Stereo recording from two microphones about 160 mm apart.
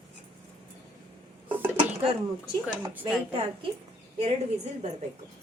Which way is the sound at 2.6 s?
10° right (ahead or behind).